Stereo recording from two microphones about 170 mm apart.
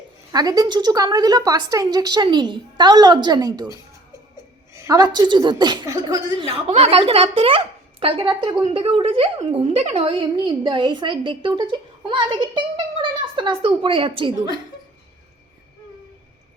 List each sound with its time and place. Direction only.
0.3 s a woman's voice: 20° right (ahead or behind)
6.7 s a woman's voice: 35° right (ahead or behind)